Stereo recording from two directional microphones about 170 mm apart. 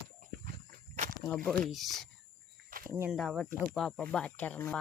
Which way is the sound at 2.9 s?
15° right (ahead or behind).